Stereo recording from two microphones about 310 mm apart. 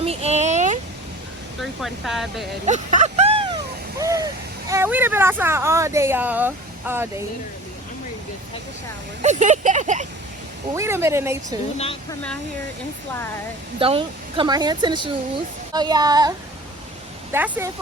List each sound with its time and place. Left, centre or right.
0.0 s a sound: centre
1.6 s speech: centre
2.6 s a sound: right
4.7 s speech: centre
9.2 s speech: right
10.8 s speech: centre
13.7 s speech: centre
17.3 s speech: centre